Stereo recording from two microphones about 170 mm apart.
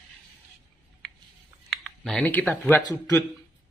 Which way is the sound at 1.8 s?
5° left (ahead or behind).